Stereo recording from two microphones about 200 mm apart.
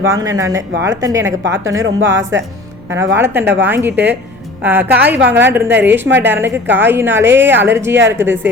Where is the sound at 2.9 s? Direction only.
10° right (ahead or behind).